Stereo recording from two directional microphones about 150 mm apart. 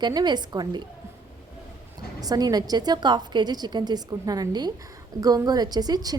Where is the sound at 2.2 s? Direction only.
25° right (ahead or behind).